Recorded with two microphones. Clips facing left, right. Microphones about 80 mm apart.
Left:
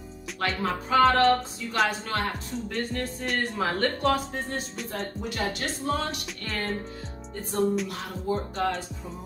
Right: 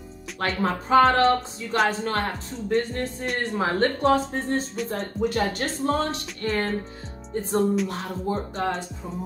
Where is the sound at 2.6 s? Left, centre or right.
Right.